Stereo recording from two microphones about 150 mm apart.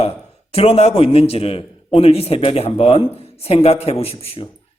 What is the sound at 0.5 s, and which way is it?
A man's voice, 40° left (ahead or behind).